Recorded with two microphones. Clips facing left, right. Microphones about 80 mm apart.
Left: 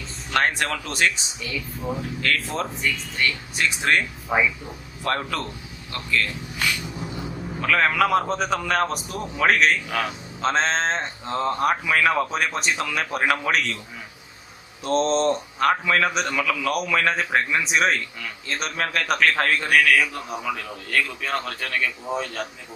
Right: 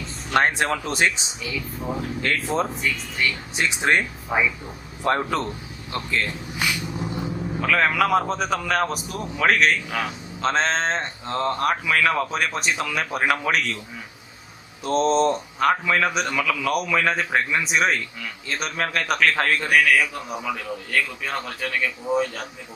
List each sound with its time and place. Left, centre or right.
0.3 s speech: right
2.2 s speech: right
2.8 s a man's voice: centre
3.5 s speech: right
5.0 s speech: right
7.6 s a man's voice: centre
14.8 s a man's voice: centre